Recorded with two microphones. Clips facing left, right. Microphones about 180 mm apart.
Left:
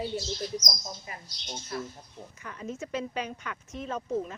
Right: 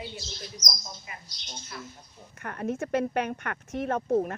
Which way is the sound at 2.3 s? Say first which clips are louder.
Right 7 dB; 60° right (ahead or behind).